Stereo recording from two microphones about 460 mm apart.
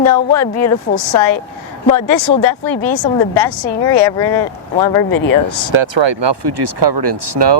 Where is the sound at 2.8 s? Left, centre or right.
Left.